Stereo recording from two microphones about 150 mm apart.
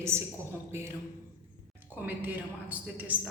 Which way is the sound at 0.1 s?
15° right (ahead or behind).